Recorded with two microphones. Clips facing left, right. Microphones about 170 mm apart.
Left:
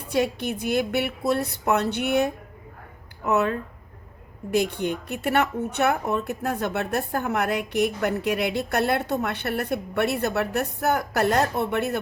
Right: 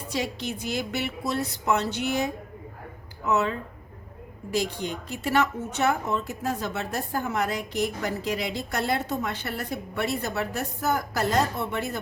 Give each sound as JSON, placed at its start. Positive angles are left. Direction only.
{"t": 0.1, "sound": "a woman's voice", "side_deg": 55}